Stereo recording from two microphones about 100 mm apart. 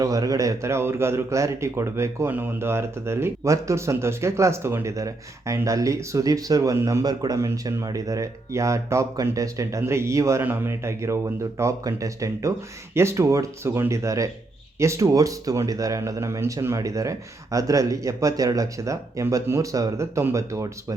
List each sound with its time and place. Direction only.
0.0 s speech: 35° right (ahead or behind)
7.0 s speech: 40° right (ahead or behind)